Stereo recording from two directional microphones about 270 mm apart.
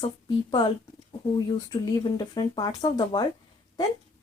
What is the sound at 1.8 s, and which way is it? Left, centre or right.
Speech, centre.